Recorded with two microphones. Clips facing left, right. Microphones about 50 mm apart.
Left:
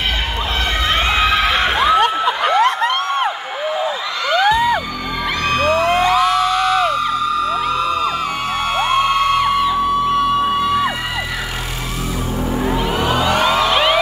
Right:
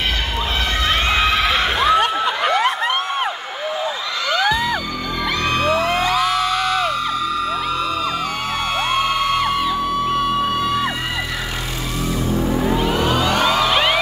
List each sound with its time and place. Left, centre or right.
0.8 s a sound: centre
5.4 s music: centre
12.3 s music: centre